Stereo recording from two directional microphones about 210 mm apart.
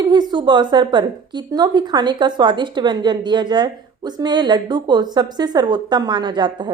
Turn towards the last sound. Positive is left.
turn(degrees=-20)  # may be behind; listen again after turning